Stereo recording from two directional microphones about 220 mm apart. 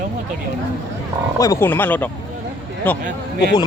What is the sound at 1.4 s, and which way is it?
Speech, 15° left (ahead or behind).